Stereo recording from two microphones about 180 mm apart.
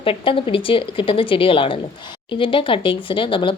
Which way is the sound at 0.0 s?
30° left (ahead or behind).